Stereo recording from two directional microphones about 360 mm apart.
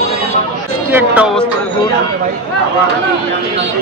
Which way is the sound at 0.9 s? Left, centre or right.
Centre.